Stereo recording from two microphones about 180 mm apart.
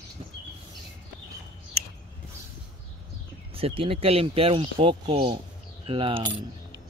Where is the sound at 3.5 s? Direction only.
30° right (ahead or behind).